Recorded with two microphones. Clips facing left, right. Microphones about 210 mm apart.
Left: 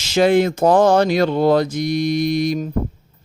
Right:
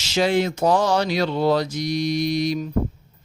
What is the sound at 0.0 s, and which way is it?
Speech, 55° left (ahead or behind).